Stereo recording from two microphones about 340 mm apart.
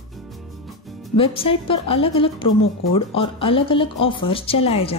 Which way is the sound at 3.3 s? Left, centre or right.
Centre.